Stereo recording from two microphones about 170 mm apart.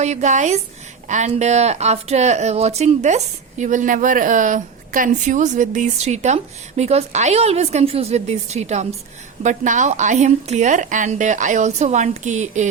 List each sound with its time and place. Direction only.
0.0 s speech: 45° right (ahead or behind)